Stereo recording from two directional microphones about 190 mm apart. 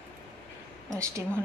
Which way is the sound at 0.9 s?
15° right (ahead or behind).